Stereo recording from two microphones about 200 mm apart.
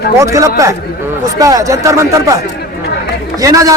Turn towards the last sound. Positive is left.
turn(degrees=-15)  # may be behind; listen again after turning